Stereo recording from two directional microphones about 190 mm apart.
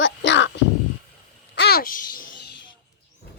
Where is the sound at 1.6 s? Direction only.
55° left (ahead or behind).